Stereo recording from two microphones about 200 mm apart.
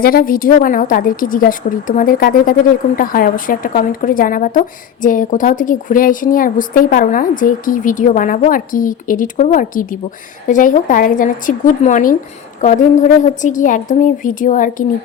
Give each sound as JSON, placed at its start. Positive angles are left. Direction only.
{"t": 0.0, "sound": "a woman's voice", "side_deg": 45}